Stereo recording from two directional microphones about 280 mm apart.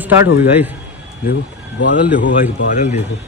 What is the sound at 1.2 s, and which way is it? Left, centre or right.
Speech, left.